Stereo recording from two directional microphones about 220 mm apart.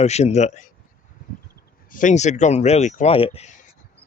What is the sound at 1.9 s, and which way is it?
Speech, 35° left (ahead or behind).